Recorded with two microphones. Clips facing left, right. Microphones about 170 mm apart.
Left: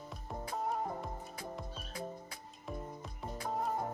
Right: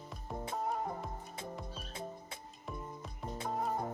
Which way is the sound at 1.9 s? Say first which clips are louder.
Left 1 dB; 25° right (ahead or behind).